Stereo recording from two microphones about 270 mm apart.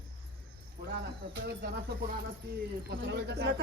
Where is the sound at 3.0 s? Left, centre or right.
Right.